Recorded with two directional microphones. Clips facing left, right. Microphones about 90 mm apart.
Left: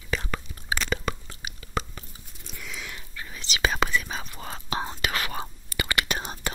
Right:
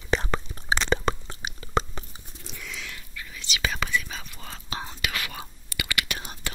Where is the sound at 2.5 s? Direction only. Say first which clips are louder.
Even; 5° left (ahead or behind).